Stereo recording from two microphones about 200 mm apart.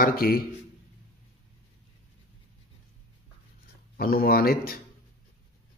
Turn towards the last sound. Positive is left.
turn(degrees=50)  # may be behind; listen again after turning